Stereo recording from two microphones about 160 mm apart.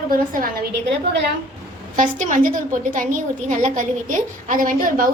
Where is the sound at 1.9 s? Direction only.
55° right (ahead or behind).